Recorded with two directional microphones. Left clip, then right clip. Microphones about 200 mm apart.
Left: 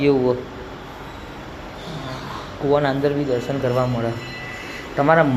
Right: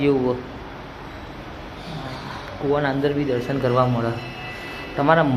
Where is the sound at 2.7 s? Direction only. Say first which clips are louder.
Left 3 dB; 5° left (ahead or behind).